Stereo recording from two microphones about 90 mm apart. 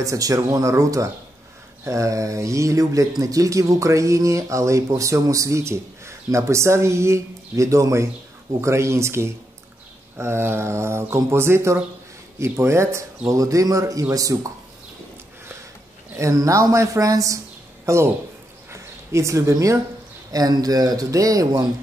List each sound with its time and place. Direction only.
0.0 s speech: 40° right (ahead or behind)
16.2 s speech: 35° right (ahead or behind)